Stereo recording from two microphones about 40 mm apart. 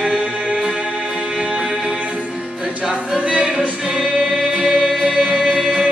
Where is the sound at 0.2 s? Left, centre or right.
Right.